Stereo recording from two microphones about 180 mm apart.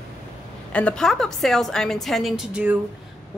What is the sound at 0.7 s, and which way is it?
A woman's voice, 5° left (ahead or behind).